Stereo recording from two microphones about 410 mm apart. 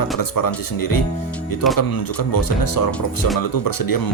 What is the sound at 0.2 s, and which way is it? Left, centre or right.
Speech, left.